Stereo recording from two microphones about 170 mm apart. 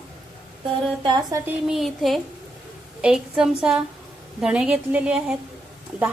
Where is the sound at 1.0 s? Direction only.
25° right (ahead or behind).